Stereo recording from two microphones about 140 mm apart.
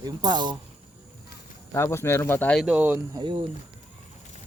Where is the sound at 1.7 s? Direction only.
20° left (ahead or behind).